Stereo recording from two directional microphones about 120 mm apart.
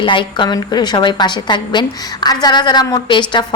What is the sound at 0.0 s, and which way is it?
A woman's voice, 45° left (ahead or behind).